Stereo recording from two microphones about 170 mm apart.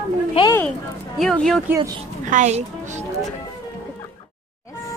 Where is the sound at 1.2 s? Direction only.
5° left (ahead or behind).